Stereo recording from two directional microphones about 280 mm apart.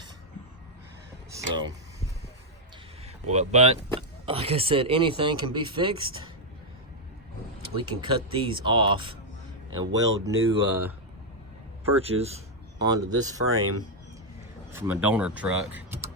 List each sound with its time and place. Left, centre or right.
1.3 s a sound: centre
3.2 s speech: right
7.8 s speech: centre
11.9 s speech: right
13.4 s speech: right
14.7 s speech: centre